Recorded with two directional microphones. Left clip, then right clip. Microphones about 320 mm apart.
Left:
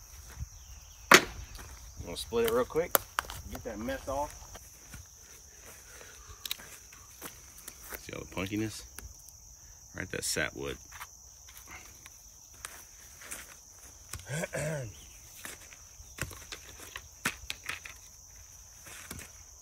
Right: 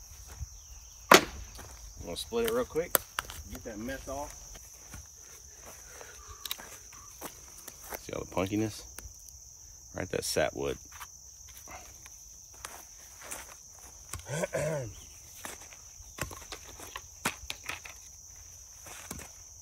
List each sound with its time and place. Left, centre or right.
1.1 s walk: centre
2.0 s speech: centre
5.9 s a sound: centre
7.9 s cricket: centre
9.9 s cricket: centre
13.2 s a sound: centre
14.1 s wild animals: centre
16.2 s cricket: centre
18.9 s a sound: centre